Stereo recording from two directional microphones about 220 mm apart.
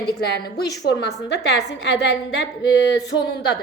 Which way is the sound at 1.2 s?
50° left (ahead or behind).